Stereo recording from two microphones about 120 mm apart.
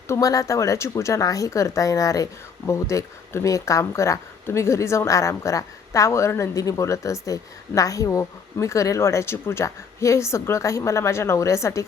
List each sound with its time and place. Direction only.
0.1 s speech: 25° left (ahead or behind)